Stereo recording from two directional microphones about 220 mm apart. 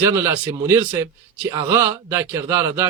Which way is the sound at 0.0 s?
15° right (ahead or behind).